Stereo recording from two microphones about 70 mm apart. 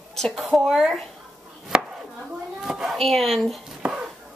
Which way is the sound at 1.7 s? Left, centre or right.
Centre.